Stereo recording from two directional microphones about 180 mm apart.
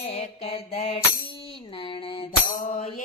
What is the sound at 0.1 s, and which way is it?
Mantra, 35° left (ahead or behind).